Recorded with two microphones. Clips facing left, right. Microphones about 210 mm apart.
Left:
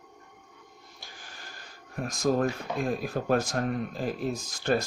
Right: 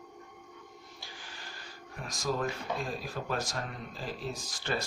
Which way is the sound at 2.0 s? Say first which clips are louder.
Left 7 dB; 50° left (ahead or behind).